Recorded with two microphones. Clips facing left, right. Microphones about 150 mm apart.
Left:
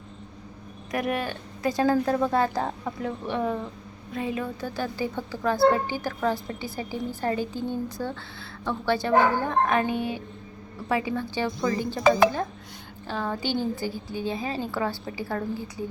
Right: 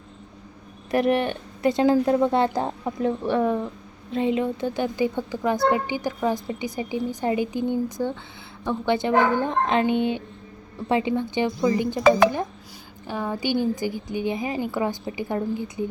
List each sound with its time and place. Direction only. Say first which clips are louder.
0.9 s speech: right 7 dB; 30° right (ahead or behind)
4.1 s a woman's voice: right 7 dB; 25° right (ahead or behind)
13.1 s a woman's voice: right 3 dB; 10° right (ahead or behind)